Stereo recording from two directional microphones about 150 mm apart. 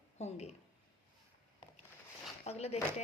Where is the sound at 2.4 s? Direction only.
45° left (ahead or behind).